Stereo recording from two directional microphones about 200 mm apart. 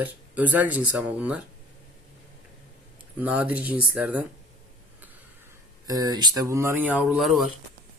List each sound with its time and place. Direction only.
0.0 s speech: 10° right (ahead or behind)
3.2 s speech: 5° right (ahead or behind)
5.9 s speech: 20° right (ahead or behind); by 7.4 s centre (ahead or behind)